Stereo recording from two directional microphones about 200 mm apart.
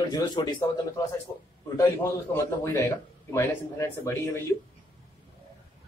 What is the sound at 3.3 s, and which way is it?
Speech, 15° left (ahead or behind).